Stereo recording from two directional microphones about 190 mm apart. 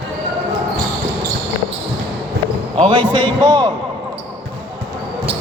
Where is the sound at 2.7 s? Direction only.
30° right (ahead or behind).